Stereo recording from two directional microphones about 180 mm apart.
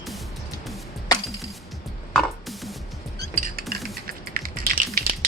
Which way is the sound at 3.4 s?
55° right (ahead or behind).